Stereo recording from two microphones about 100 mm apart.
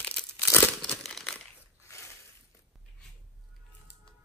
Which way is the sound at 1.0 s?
5° left (ahead or behind).